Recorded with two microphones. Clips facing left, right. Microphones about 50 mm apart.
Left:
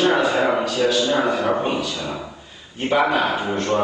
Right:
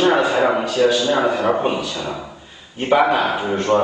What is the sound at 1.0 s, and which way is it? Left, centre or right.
Speech, right.